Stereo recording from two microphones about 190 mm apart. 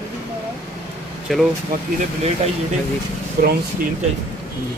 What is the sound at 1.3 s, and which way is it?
Speech, centre (ahead or behind).